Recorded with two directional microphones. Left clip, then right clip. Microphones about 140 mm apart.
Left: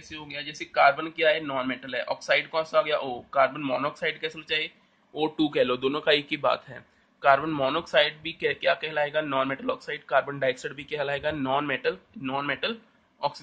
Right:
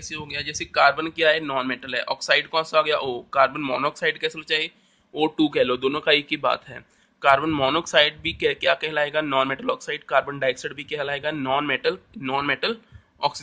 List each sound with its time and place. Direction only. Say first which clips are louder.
0.1 s a man's voice: right 6 dB; 55° right (ahead or behind); by 6.8 s 30° right (ahead or behind)
7.2 s a man's voice: right 3 dB; 40° right (ahead or behind)